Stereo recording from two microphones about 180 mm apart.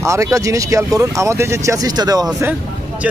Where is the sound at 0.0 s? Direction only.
15° right (ahead or behind).